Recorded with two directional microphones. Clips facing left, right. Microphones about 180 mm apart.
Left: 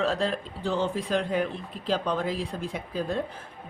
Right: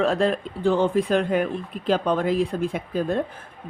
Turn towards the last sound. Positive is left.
turn(degrees=-55)  # may be behind; listen again after turning